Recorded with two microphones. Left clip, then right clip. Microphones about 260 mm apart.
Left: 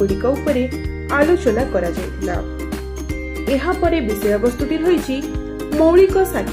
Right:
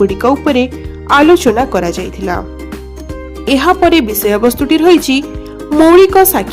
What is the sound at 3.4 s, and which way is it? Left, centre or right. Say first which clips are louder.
Speech: right 9 dB; right.